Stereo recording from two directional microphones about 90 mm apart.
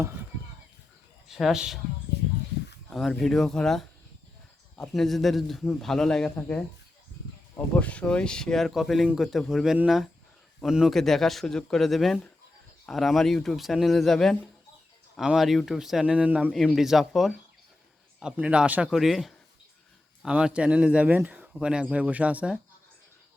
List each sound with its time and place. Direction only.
0.0 s chop: 25° right (ahead or behind)
1.3 s a man's voice: 5° right (ahead or behind)
2.9 s a man's voice: centre (ahead or behind)
7.8 s a man's voice: 15° left (ahead or behind); by 16.5 s 15° right (ahead or behind)
16.7 s a man's voice: 5° right (ahead or behind)
18.9 s a man's voice: centre (ahead or behind)
20.2 s speech: 15° right (ahead or behind)
21.2 s a sound: 15° right (ahead or behind)
21.6 s speech: 10° right (ahead or behind)